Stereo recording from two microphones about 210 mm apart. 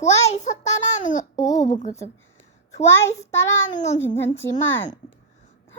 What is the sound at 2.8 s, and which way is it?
Speech, 15° left (ahead or behind).